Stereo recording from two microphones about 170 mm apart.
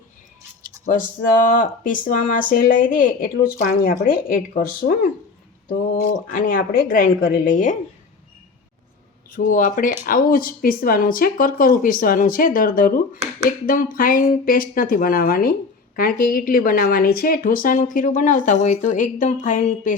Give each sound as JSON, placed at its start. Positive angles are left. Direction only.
{"t": 0.9, "sound": "speech", "side_deg": 55}
{"t": 9.3, "sound": "speech", "side_deg": 50}